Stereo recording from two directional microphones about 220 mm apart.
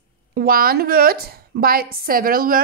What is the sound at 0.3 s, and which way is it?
A woman's voice, 45° right (ahead or behind).